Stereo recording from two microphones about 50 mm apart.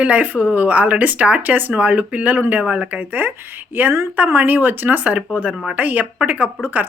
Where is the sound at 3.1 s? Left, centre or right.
Right.